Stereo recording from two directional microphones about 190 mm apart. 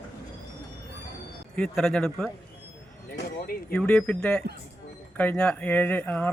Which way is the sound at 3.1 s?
55° left (ahead or behind).